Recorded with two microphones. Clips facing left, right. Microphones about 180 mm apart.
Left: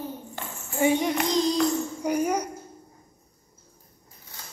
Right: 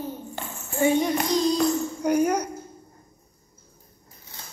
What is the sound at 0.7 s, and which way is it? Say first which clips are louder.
Speech: right 1 dB; 10° left (ahead or behind).